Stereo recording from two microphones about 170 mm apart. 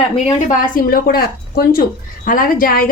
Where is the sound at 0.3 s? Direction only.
50° left (ahead or behind).